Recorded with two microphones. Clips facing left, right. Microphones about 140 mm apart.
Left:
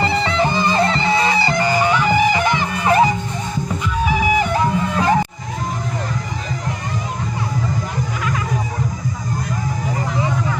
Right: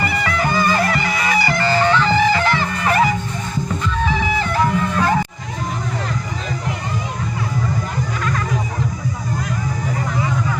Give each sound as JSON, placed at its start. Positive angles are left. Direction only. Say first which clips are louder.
{"t": 0.0, "sound": "music", "louder": "left 3 dB", "side_deg": 25}